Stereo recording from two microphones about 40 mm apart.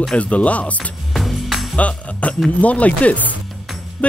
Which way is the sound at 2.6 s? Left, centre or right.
Left.